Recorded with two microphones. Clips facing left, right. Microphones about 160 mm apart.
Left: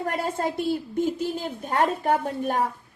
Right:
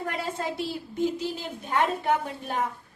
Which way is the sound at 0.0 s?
50° left (ahead or behind).